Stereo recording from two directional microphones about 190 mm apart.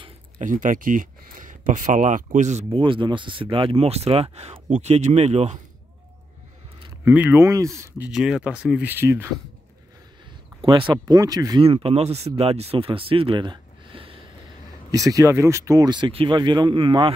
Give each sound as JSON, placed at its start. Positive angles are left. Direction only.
{"t": 0.4, "sound": "speech", "side_deg": -45}
{"t": 7.1, "sound": "speech", "side_deg": -10}
{"t": 8.1, "sound": "speech", "side_deg": -5}
{"t": 10.6, "sound": "speech", "side_deg": -25}
{"t": 14.9, "sound": "speech", "side_deg": -20}